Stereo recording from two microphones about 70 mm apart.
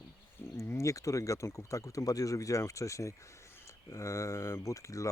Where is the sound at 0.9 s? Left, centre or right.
Left.